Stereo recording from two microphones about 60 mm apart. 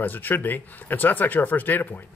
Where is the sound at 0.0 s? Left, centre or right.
Left.